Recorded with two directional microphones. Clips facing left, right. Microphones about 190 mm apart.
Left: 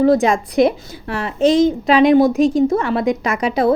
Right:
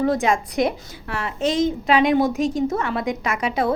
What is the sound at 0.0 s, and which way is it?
A woman's voice, 35° left (ahead or behind).